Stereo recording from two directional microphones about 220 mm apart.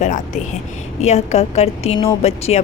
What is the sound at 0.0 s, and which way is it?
A woman's voice, 30° left (ahead or behind).